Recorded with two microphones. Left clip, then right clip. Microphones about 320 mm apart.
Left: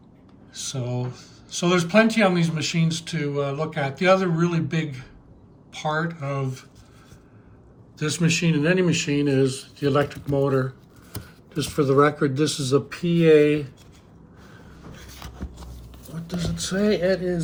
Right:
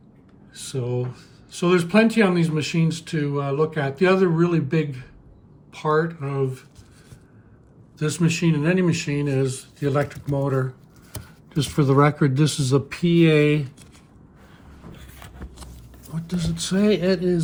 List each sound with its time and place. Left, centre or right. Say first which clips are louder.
0.5 s speech: right 3 dB; centre
7.9 s speech: left 1 dB; centre
9.8 s speech: left 2 dB; right
11.5 s speech: even; right
16.3 s speech: right 1 dB; right
16.9 s speech: even; right